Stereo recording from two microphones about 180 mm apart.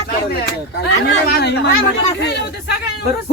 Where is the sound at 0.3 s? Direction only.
65° left (ahead or behind).